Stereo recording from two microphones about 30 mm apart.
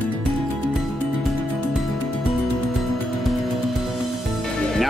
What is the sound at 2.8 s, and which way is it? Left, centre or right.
Music, centre.